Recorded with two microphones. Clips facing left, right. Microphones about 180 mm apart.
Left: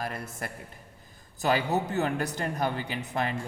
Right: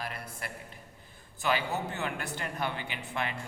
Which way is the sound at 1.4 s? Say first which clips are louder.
Left 5 dB; 40° left (ahead or behind).